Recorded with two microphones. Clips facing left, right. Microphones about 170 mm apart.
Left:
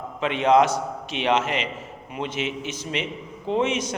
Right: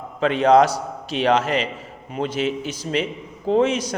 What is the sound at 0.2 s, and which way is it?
A man's voice, 35° right (ahead or behind).